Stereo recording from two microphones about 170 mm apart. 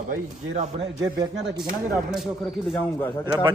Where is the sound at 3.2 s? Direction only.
25° right (ahead or behind).